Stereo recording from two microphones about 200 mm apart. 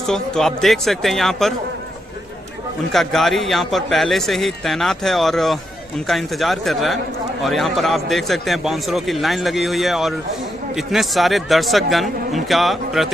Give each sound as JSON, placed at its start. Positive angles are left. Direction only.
{"t": 0.1, "sound": "a man's voice", "side_deg": 0}
{"t": 2.9, "sound": "a man's voice", "side_deg": 0}